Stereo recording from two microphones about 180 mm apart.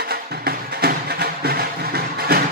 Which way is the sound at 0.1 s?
65° right (ahead or behind).